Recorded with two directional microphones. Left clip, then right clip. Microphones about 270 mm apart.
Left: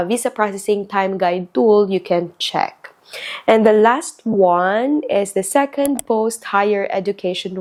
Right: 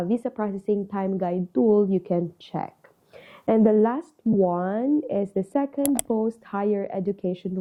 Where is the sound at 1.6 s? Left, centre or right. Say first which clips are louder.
Left 8 dB; left.